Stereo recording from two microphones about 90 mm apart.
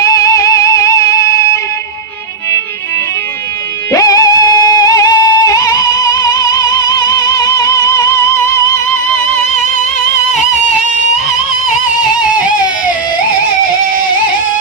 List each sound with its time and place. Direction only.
0.0 s music: 40° left (ahead or behind)
3.9 s music: 40° left (ahead or behind)